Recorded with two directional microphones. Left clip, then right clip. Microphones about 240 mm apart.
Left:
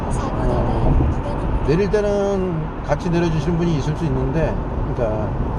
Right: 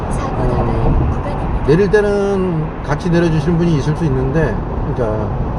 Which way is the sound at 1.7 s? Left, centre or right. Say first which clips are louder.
Right 6 dB; centre.